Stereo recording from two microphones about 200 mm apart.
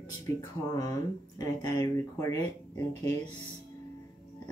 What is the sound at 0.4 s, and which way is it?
Speech, 20° left (ahead or behind).